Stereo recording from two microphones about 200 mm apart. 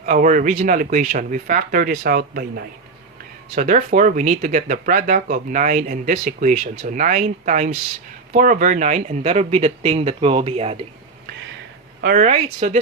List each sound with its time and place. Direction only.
0.0 s speech: 40° right (ahead or behind)
3.5 s speech: 35° right (ahead or behind)
12.0 s speech: 40° right (ahead or behind)